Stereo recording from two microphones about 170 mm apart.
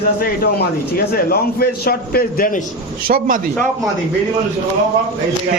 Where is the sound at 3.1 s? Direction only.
55° right (ahead or behind).